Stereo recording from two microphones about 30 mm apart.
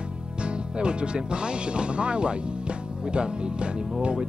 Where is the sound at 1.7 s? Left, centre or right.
Right.